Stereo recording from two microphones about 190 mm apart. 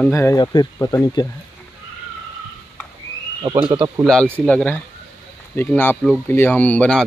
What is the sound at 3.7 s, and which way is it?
Speech, 15° right (ahead or behind).